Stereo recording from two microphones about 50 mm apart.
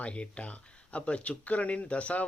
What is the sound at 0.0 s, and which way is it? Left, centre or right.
Speech, left.